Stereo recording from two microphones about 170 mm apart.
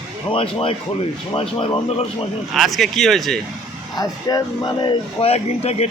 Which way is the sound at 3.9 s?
20° left (ahead or behind).